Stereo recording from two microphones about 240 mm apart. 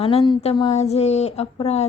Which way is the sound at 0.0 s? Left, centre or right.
Left.